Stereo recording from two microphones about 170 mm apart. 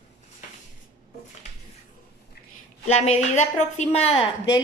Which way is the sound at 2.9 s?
40° left (ahead or behind).